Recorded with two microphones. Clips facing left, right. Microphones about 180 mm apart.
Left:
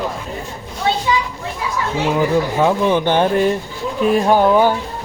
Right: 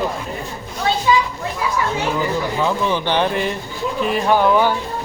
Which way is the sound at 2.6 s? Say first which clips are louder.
Left 4 dB; 55° left (ahead or behind).